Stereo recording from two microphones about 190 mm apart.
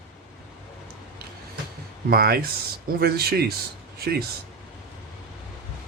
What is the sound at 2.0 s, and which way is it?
Speech, 55° right (ahead or behind).